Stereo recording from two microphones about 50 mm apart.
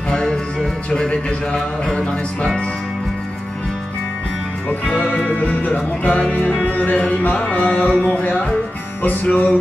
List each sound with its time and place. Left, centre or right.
0.1 s music: centre
4.8 s music: centre
5.4 s music: left
9.0 s music: left